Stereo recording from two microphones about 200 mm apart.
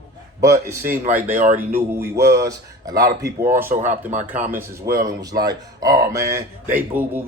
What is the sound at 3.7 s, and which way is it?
Speech, 35° right (ahead or behind).